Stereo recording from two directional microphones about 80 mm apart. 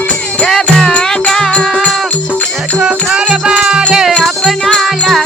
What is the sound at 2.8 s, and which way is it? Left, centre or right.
Music, centre.